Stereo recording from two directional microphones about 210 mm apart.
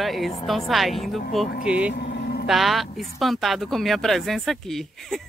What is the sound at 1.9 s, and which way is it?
Vehicle, 50° left (ahead or behind).